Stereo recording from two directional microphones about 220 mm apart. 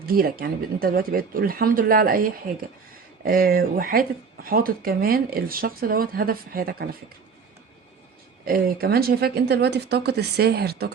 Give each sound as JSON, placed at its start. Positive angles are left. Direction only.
{"t": 0.0, "sound": "speech", "side_deg": -40}
{"t": 8.4, "sound": "speech", "side_deg": -45}